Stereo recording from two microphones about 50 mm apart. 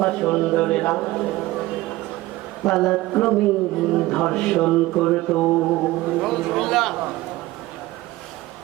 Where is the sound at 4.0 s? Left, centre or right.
Left.